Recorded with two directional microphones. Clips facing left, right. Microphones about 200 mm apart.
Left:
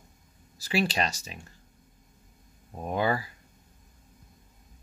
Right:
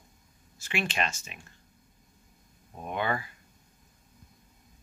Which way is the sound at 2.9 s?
35° left (ahead or behind).